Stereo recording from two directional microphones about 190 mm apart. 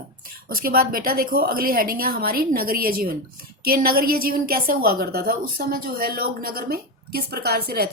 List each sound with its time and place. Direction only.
0.4 s a woman's voice: 50° right (ahead or behind)